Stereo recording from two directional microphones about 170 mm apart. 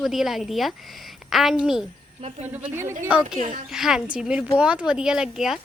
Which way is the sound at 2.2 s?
35° right (ahead or behind).